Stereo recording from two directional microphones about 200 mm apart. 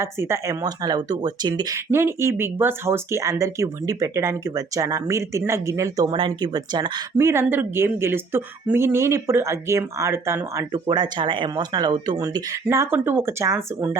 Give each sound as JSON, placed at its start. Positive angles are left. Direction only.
{"t": 0.0, "sound": "speech", "side_deg": -15}